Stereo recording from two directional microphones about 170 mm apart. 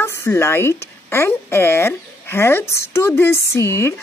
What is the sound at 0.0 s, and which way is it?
Speech, 15° left (ahead or behind).